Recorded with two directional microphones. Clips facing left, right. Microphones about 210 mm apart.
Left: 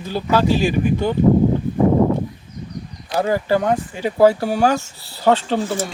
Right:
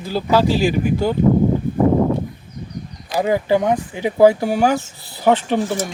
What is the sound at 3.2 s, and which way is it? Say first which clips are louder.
Speech: right 1 dB; 15° right (ahead or behind).